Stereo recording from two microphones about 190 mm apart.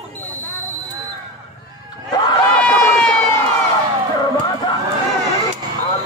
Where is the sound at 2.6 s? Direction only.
5° left (ahead or behind).